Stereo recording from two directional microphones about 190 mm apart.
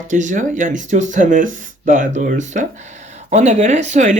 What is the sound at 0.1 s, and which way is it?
Speech, 40° right (ahead or behind).